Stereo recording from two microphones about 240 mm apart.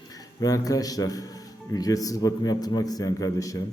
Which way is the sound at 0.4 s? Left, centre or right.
Centre.